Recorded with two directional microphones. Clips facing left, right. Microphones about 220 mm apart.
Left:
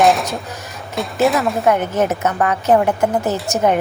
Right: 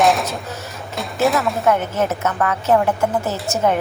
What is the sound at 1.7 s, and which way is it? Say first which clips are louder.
A woman's voice: left 2 dB; 15° left (ahead or behind).